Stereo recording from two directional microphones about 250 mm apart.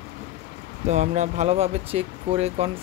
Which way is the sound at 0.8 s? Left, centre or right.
Right.